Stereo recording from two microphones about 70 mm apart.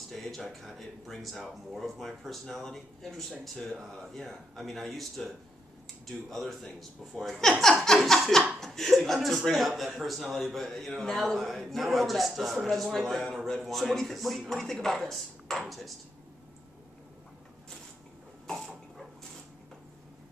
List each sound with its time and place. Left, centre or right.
0.1 s speech: centre